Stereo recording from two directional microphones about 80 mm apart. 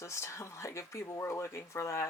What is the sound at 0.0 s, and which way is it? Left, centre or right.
Speech, left.